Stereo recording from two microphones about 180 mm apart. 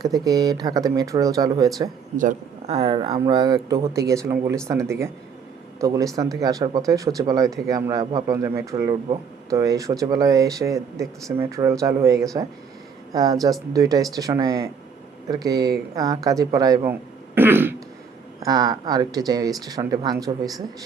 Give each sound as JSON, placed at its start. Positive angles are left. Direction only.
{"t": 0.0, "sound": "speech", "side_deg": -20}
{"t": 2.1, "sound": "speech", "side_deg": -40}